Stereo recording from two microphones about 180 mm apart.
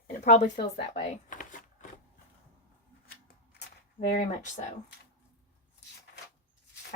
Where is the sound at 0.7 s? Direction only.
45° left (ahead or behind).